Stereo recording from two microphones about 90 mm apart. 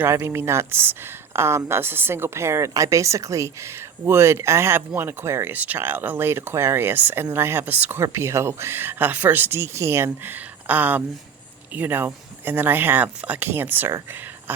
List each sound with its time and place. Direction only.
0.0 s speech: 30° right (ahead or behind)